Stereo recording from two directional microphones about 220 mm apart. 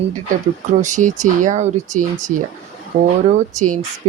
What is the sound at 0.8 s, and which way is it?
Speech, 35° right (ahead or behind).